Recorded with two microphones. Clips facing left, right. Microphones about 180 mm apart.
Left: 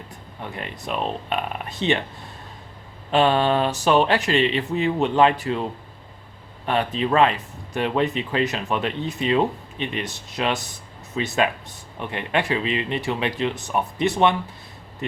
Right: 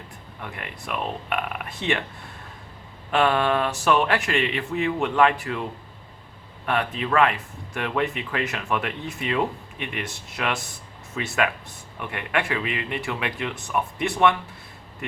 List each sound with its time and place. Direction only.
0.4 s speech: 25° left (ahead or behind)
3.1 s speech: 30° left (ahead or behind)
6.7 s speech: 25° left (ahead or behind)